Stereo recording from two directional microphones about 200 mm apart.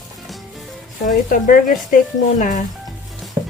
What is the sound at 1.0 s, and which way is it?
Speech, 40° left (ahead or behind).